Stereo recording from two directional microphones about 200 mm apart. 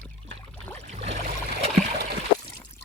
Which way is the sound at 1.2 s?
35° right (ahead or behind).